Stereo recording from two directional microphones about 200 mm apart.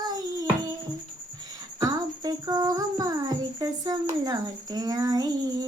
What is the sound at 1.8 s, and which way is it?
Music, 20° right (ahead or behind).